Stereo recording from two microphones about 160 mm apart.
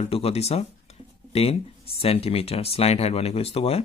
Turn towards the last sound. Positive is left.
turn(degrees=40)  # may be behind; listen again after turning